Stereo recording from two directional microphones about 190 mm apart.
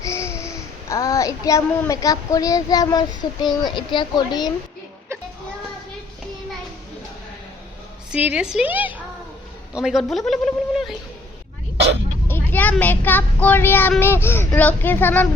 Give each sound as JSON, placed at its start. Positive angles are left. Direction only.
{"t": 0.0, "sound": "a child's voice", "side_deg": 15}
{"t": 8.1, "sound": "a woman's voice", "side_deg": -5}
{"t": 12.3, "sound": "speech", "side_deg": 10}